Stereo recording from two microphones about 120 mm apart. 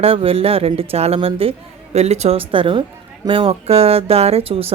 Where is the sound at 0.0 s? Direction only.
50° right (ahead or behind).